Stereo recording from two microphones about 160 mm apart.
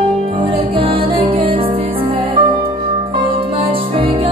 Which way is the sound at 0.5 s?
35° right (ahead or behind).